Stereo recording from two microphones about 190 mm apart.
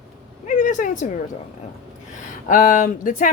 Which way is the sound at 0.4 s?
45° left (ahead or behind).